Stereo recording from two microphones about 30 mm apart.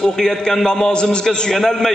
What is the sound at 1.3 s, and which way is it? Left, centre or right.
Speech, centre.